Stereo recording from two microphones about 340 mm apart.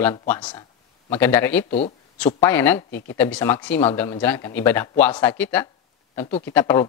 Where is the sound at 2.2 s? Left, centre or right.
Centre.